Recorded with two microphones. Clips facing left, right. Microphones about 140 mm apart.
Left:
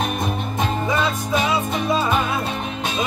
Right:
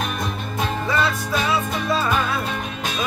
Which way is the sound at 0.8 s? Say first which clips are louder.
Left 1 dB; 20° left (ahead or behind).